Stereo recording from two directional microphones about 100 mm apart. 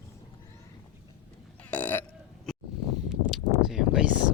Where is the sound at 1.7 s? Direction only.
15° left (ahead or behind).